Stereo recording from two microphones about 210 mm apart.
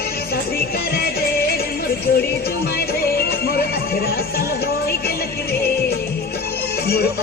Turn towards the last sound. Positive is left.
turn(degrees=50)  # may be behind; listen again after turning